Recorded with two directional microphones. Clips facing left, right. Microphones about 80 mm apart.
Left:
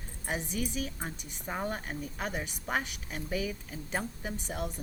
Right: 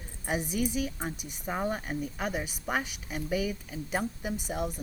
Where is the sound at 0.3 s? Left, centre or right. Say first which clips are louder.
Right 4 dB; centre.